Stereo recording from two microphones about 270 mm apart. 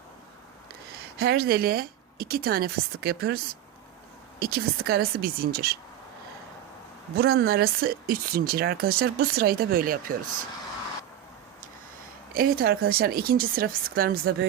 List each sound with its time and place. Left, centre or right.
1.1 s speech: right
7.2 s speech: right
12.3 s speech: right